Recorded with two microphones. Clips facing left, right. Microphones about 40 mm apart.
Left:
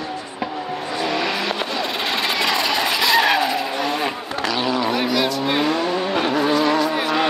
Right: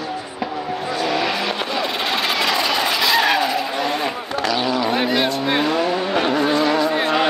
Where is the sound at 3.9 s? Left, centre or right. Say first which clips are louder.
Right 1 dB; centre.